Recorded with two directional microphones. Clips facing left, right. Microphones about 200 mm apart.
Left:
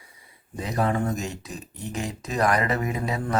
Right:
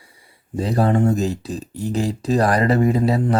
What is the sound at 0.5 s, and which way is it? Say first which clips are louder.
Speech: right 7 dB; 30° right (ahead or behind).